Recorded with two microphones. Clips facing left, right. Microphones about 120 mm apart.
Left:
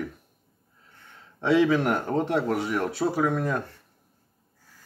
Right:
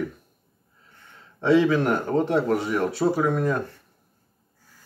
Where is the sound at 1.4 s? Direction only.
10° left (ahead or behind).